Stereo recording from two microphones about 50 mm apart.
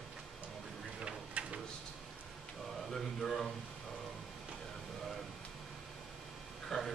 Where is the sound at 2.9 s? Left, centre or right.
Centre.